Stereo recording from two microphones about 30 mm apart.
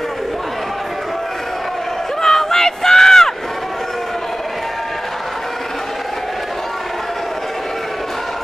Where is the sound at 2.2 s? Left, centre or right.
Centre.